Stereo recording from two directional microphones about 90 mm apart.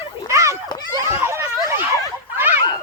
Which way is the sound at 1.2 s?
30° right (ahead or behind).